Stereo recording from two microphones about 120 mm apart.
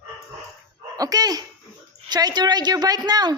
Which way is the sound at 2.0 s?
35° right (ahead or behind).